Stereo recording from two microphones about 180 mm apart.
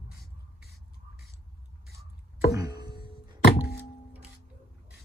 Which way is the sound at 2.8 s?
60° left (ahead or behind).